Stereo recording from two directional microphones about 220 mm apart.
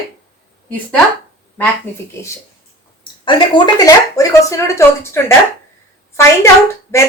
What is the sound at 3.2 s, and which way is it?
Speech, 20° left (ahead or behind).